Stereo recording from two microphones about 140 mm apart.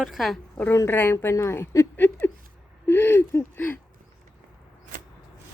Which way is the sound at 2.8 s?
15° left (ahead or behind).